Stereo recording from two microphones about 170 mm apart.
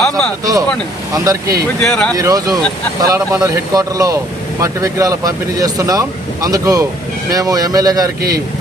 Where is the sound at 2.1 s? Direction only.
20° right (ahead or behind).